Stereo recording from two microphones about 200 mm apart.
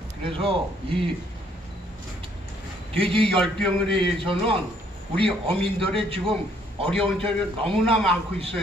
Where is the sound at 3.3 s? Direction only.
5° left (ahead or behind).